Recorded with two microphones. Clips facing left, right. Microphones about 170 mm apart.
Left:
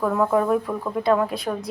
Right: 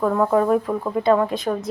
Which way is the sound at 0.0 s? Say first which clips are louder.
Right 2 dB; 15° right (ahead or behind).